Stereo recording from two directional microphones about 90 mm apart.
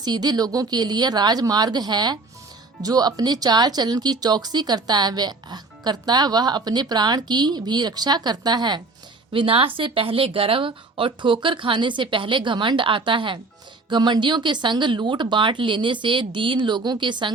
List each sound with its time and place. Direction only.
0.0 s speech: 50° right (ahead or behind)
9.3 s speech: 80° right; by 17.3 s 60° right (ahead or behind)